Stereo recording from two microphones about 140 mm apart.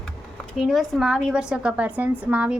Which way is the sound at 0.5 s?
Centre (ahead or behind).